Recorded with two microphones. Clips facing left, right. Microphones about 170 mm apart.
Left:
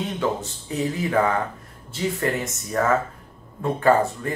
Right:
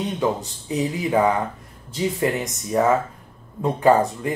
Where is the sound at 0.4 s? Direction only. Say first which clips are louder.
Right 2 dB; 15° right (ahead or behind).